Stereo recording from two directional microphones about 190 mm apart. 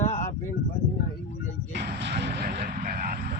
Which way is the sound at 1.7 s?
60° right (ahead or behind).